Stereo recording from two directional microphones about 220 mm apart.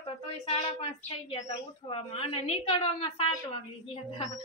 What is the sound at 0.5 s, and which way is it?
A woman's voice, 25° left (ahead or behind).